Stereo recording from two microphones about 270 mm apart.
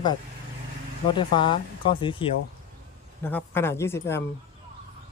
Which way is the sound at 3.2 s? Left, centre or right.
Centre.